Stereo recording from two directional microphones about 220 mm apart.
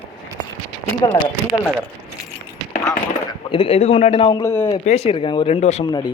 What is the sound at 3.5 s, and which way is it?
A man's voice, 25° left (ahead or behind).